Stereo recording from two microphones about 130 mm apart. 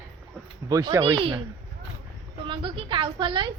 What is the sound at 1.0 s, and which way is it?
Speech, 40° right (ahead or behind).